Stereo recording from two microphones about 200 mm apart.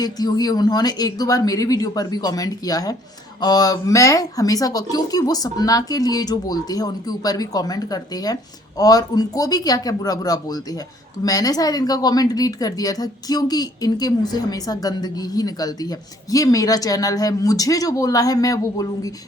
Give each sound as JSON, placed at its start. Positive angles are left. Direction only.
{"t": 0.0, "sound": "speech", "side_deg": 20}